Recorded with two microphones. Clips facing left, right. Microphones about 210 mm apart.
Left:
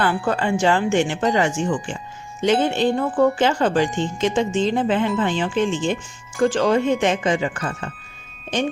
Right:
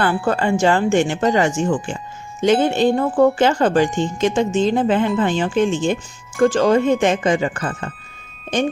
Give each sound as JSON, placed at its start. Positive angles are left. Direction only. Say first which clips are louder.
{"t": 0.0, "sound": "speech", "louder": "right 2 dB", "side_deg": -50}